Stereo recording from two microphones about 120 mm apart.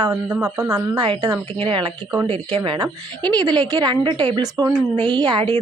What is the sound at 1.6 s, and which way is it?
A woman's voice, 45° right (ahead or behind).